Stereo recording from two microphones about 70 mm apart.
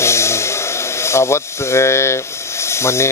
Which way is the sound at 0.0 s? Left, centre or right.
Left.